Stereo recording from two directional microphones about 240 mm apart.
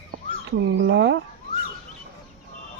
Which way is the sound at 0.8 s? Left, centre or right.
Right.